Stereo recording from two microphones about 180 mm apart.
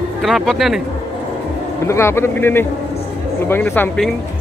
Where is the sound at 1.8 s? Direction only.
15° left (ahead or behind).